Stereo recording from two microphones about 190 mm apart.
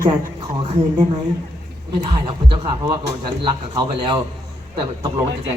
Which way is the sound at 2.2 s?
25° right (ahead or behind).